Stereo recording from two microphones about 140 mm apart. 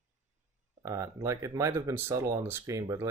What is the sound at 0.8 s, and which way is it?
Speech, 20° right (ahead or behind).